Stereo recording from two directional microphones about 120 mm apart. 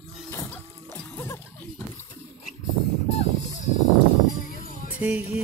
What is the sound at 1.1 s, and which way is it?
Splash, 20° left (ahead or behind).